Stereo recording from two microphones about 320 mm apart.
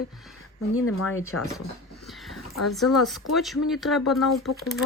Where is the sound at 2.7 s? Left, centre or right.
Centre.